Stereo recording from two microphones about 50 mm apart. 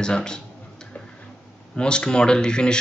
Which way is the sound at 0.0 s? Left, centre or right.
Centre.